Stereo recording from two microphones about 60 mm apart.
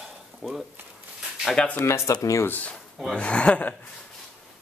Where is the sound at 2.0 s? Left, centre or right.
Left.